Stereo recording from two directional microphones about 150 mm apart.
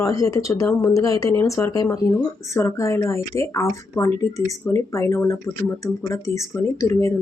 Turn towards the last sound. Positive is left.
turn(degrees=20)  # may be behind; listen again after turning